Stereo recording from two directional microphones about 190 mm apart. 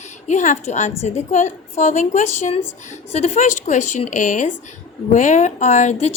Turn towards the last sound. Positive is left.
turn(degrees=40)  # may be behind; listen again after turning